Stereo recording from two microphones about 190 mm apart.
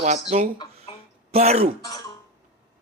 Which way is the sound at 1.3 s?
35° right (ahead or behind).